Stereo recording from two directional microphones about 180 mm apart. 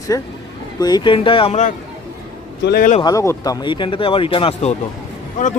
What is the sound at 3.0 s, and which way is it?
Speech, 20° left (ahead or behind).